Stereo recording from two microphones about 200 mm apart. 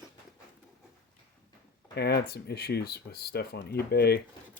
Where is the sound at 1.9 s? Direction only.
55° left (ahead or behind).